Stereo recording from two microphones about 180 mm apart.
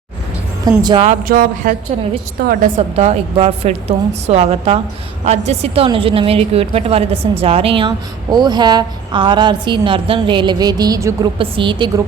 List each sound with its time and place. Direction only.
0.8 s a woman's voice: 25° right (ahead or behind)
1.0 s a sound: 50° right (ahead or behind)
2.9 s a woman's voice: 35° right (ahead or behind)